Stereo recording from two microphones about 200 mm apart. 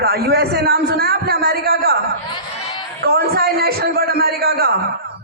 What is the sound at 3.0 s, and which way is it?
A man's voice, 50° right (ahead or behind).